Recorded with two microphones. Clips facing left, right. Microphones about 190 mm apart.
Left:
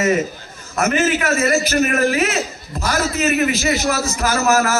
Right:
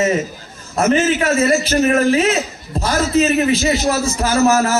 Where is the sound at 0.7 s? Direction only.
30° right (ahead or behind).